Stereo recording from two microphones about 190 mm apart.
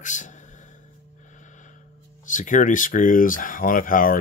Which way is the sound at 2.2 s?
40° left (ahead or behind).